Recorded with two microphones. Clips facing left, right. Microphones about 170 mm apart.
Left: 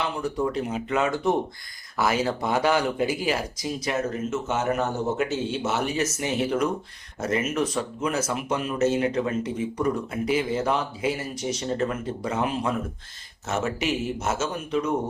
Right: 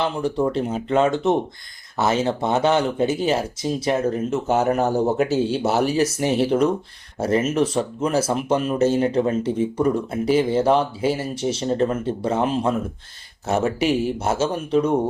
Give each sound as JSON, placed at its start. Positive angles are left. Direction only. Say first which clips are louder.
{"t": 0.0, "sound": "speech", "louder": "right 5 dB", "side_deg": -30}